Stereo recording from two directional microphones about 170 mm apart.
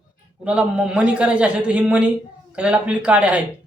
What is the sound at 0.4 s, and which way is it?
A man's voice, 5° right (ahead or behind).